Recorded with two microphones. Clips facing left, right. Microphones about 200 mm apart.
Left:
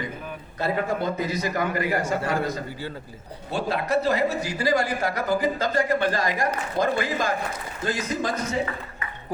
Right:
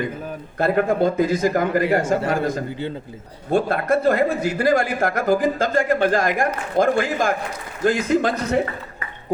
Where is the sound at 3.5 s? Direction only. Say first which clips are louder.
Right 6 dB; 50° right (ahead or behind).